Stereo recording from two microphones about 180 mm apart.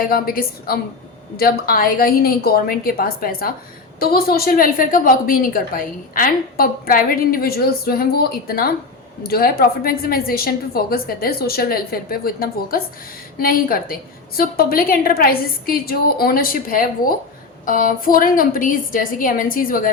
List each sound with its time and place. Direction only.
0.0 s a woman's voice: 55° left (ahead or behind)